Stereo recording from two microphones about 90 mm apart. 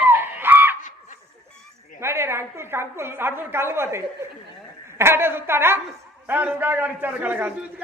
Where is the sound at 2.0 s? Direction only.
30° right (ahead or behind).